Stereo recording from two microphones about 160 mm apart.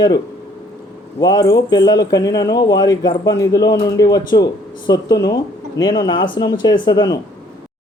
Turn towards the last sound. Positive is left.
turn(degrees=25)  # may be behind; listen again after turning